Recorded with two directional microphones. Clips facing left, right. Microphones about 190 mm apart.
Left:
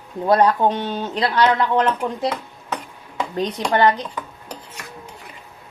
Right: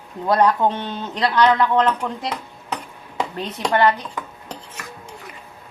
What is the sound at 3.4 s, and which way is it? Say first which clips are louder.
Speech: left 1 dB; 20° left (ahead or behind).